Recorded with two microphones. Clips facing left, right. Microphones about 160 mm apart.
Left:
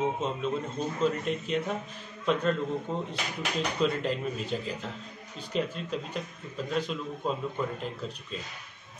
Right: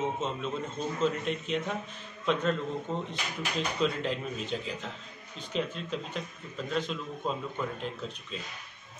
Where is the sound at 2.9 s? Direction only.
5° left (ahead or behind).